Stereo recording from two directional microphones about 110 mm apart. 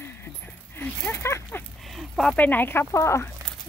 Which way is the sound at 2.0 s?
Centre (ahead or behind).